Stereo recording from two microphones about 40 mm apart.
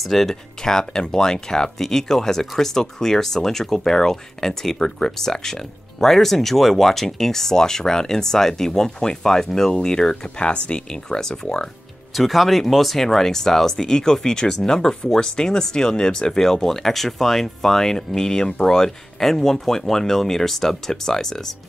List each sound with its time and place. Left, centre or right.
0.0 s speech: centre
12.2 s speech: centre